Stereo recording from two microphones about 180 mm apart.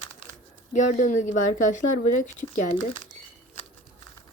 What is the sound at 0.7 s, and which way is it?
Speech, 45° left (ahead or behind).